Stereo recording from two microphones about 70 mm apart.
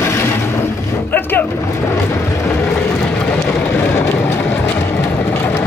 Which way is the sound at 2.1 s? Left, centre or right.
Left.